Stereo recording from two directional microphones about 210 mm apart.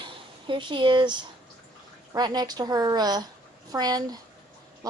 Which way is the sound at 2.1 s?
20° right (ahead or behind).